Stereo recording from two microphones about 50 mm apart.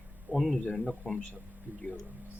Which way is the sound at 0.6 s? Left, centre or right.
Left.